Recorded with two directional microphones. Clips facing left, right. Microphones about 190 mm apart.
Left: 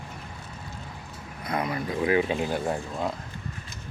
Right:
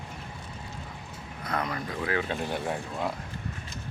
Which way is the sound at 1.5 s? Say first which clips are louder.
Left 3 dB; 10° left (ahead or behind).